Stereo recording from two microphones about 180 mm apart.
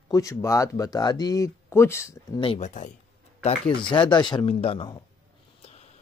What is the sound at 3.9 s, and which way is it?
Speech, 25° left (ahead or behind).